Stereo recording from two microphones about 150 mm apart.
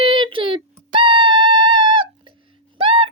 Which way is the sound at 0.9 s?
35° right (ahead or behind).